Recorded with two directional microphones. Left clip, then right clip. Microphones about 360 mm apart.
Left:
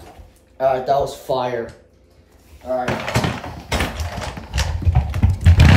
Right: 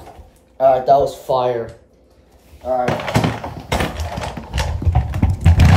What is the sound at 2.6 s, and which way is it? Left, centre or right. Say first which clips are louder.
Speech: right 3 dB; right.